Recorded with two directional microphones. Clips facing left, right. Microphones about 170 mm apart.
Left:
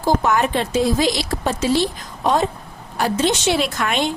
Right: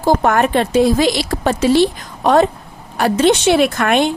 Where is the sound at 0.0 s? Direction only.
55° right (ahead or behind).